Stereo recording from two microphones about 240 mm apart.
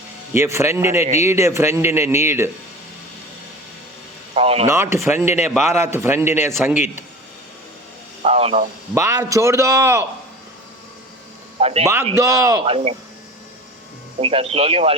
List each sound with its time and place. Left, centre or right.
0.3 s a man's voice: centre
4.4 s speech: right
4.7 s a man's voice: centre
8.2 s speech: right
9.0 s a man's voice: centre
11.6 s speech: right
12.1 s a man's voice: centre
12.6 s speech: right
14.2 s speech: right